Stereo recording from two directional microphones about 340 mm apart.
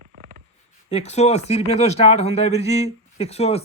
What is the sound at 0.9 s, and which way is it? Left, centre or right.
Speech, centre.